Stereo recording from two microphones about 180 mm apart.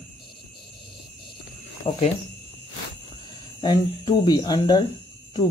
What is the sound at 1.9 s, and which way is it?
Speech, 30° left (ahead or behind).